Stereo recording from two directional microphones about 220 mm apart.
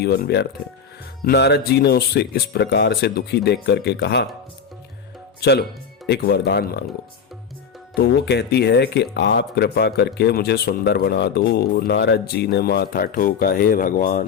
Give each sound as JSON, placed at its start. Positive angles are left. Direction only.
{"t": 0.0, "sound": "speech", "side_deg": 45}
{"t": 5.4, "sound": "speech", "side_deg": 45}
{"t": 7.9, "sound": "speech", "side_deg": 45}